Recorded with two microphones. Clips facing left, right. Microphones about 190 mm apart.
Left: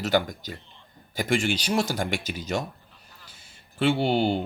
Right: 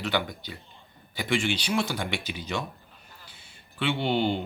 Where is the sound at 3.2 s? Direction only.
40° left (ahead or behind).